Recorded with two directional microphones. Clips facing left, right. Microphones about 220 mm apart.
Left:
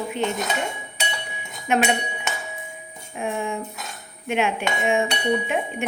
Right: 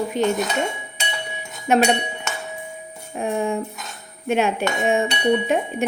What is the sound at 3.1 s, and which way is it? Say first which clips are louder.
Speech: right 4 dB; 40° right (ahead or behind).